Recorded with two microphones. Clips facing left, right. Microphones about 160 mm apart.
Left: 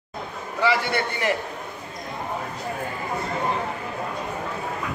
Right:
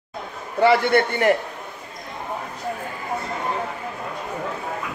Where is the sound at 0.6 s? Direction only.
55° right (ahead or behind).